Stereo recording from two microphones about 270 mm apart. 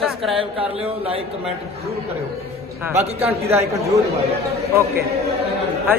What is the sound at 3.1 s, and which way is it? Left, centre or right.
Speech, right.